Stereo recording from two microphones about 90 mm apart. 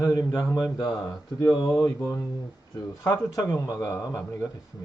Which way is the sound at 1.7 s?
25° left (ahead or behind).